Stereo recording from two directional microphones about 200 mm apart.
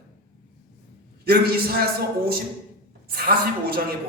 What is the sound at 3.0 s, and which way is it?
Speech, 50° right (ahead or behind).